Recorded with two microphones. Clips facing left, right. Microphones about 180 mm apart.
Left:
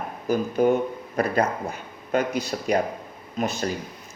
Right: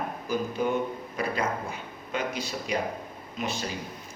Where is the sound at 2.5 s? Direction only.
55° left (ahead or behind).